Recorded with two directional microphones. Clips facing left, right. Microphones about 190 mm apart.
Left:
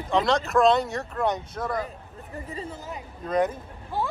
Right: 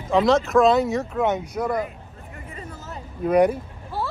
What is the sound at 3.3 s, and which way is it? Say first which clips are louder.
Speech: right 7 dB; 10° right (ahead or behind).